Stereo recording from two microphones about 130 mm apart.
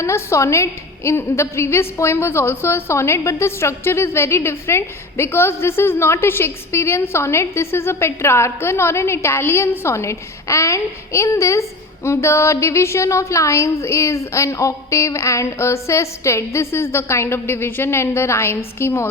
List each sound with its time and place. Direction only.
0.0 s a woman's voice: 20° left (ahead or behind)